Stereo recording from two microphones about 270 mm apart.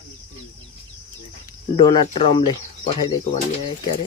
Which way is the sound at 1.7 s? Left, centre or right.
Centre.